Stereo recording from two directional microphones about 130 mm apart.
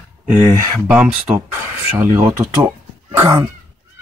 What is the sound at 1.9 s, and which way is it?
Speech, 20° right (ahead or behind).